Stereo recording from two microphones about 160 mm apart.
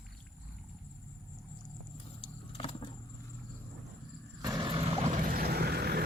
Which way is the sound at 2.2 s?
35° left (ahead or behind).